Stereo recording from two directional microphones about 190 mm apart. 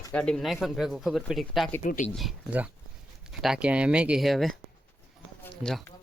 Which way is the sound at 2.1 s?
5° right (ahead or behind).